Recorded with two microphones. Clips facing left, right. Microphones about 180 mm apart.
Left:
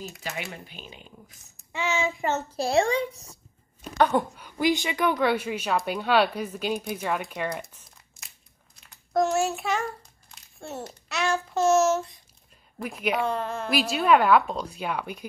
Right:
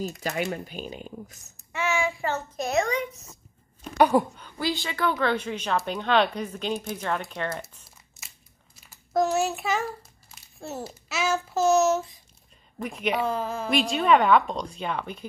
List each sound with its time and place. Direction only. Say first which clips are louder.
0.3 s speech: right 6 dB; 45° right (ahead or behind)
1.7 s a child's voice: right 1 dB; 20° left (ahead or behind); by 3.3 s 35° left (ahead or behind)
4.0 s a woman's voice: right 2 dB; 5° right (ahead or behind)
4.4 s speech: left 5 dB; 15° left (ahead or behind)
8.7 s a child's voice: even; 5° right (ahead or behind)